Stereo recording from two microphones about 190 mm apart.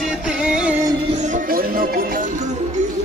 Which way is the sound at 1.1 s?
40° right (ahead or behind).